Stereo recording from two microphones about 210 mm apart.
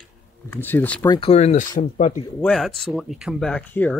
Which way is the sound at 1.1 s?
25° left (ahead or behind).